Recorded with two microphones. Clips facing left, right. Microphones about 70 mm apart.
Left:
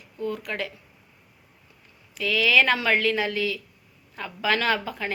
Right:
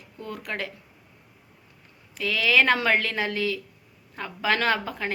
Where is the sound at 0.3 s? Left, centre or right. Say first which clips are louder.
Left 2 dB; right.